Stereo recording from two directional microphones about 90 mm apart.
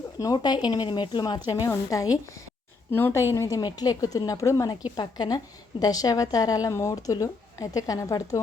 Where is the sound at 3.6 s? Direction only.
50° left (ahead or behind).